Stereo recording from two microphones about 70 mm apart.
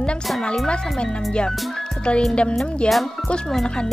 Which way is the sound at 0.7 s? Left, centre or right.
Centre.